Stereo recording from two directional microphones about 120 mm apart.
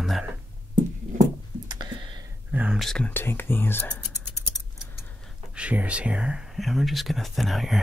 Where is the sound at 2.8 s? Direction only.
5° left (ahead or behind).